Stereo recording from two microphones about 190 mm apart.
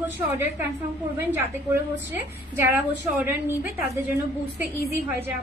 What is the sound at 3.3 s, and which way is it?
Speech, 10° right (ahead or behind).